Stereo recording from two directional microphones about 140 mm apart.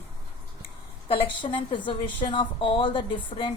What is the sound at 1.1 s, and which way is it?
A woman's voice, 40° left (ahead or behind).